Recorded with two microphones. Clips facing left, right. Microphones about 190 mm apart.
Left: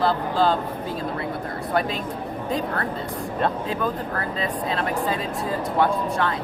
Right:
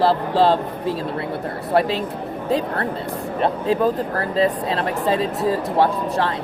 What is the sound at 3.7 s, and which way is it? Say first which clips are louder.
Speech: right 7 dB; 35° right (ahead or behind).